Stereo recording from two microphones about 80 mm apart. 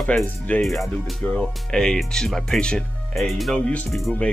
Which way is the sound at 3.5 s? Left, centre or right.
Centre.